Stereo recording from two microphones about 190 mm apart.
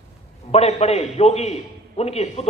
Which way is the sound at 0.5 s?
35° left (ahead or behind).